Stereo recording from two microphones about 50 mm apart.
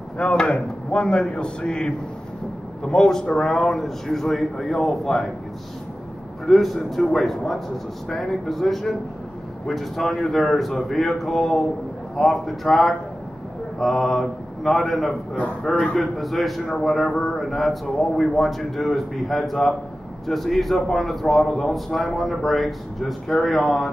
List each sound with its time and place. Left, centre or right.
0.2 s a man's voice: left; by 5.3 s centre
6.4 s a man's voice: centre
13.7 s a man's voice: centre